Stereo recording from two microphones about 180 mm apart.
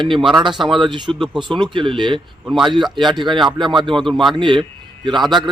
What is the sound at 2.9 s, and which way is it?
Speech, 25° right (ahead or behind).